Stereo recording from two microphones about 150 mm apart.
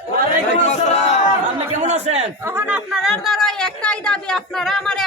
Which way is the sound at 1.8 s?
50° right (ahead or behind).